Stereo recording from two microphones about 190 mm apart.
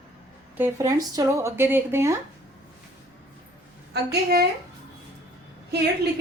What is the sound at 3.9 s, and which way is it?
Speech, 55° right (ahead or behind).